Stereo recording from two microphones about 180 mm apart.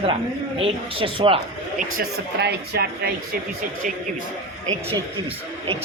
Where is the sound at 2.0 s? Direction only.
60° right (ahead or behind).